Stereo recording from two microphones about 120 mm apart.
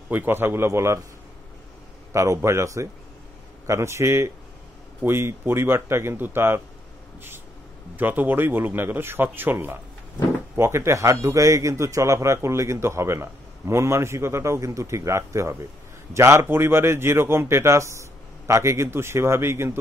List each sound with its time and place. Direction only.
0.1 s a man's voice: 15° right (ahead or behind)
2.1 s a man's voice: 25° right (ahead or behind)
7.9 s a man's voice: 15° right (ahead or behind)